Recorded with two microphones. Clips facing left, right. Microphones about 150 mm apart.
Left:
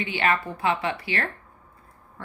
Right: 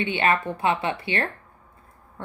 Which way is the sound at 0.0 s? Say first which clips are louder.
Right 2 dB; 25° right (ahead or behind).